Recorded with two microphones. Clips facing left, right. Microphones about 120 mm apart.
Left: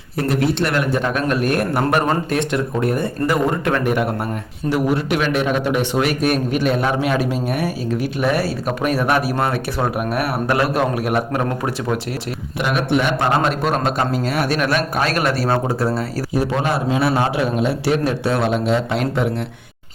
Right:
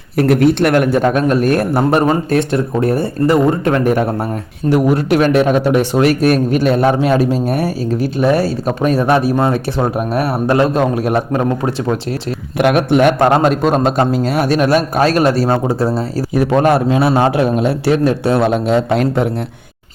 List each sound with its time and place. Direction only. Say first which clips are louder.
0.2 s a man's voice: right 7 dB; 60° right (ahead or behind); by 3.8 s 30° right (ahead or behind)
3.8 s a man's voice: right 5 dB; 40° right (ahead or behind)
12.5 s a man's voice: right 7 dB; 55° right (ahead or behind)
13.3 s a man's voice: right 6 dB; 40° right (ahead or behind)
15.4 s a man's voice: right 4 dB; 20° right (ahead or behind)
16.3 s a man's voice: right 8 dB; 55° right (ahead or behind)